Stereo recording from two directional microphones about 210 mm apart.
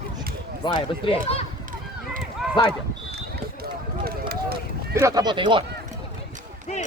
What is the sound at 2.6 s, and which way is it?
Speech, 20° left (ahead or behind).